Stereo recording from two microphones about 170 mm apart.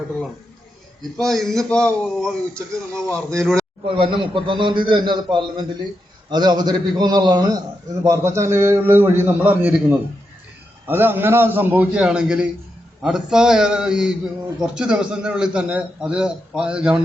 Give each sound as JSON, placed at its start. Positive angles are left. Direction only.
{"t": 1.2, "sound": "a man's voice", "side_deg": 0}
{"t": 3.8, "sound": "a man's voice", "side_deg": -30}